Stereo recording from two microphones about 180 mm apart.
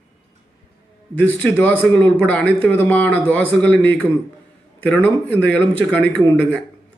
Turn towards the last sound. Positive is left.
turn(degrees=10)  # may be behind; listen again after turning